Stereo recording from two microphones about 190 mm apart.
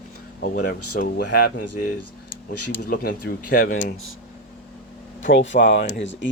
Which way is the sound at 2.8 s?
50° left (ahead or behind).